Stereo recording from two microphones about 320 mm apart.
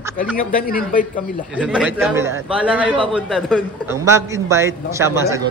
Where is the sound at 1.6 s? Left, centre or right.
Centre.